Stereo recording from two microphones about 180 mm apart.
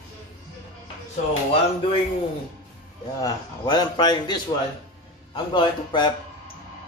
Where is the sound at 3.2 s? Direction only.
20° left (ahead or behind).